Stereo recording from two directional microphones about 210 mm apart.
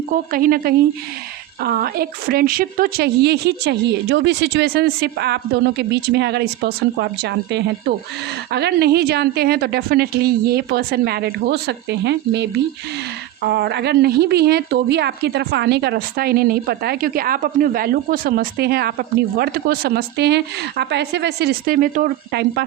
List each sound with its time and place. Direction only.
0.3 s a woman's voice: 45° right (ahead or behind)